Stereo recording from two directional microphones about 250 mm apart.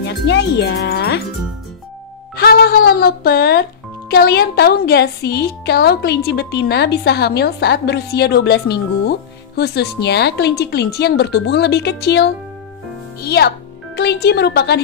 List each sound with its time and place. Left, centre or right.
0.0 s a child's voice: left
2.3 s a woman's voice: left